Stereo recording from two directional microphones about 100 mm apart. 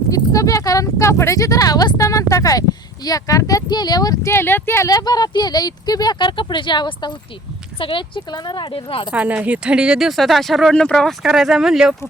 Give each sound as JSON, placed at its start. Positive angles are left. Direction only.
{"t": 0.1, "sound": "speech", "side_deg": 35}
{"t": 4.9, "sound": "a woman's voice", "side_deg": 40}
{"t": 9.1, "sound": "speech", "side_deg": -15}
{"t": 11.2, "sound": "speech", "side_deg": -5}